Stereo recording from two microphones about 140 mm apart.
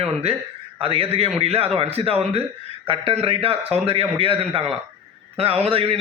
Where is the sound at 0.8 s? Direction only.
45° right (ahead or behind).